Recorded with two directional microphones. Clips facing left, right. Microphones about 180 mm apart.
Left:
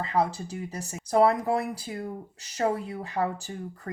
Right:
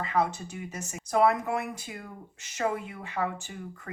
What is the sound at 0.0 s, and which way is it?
Speech, 30° left (ahead or behind).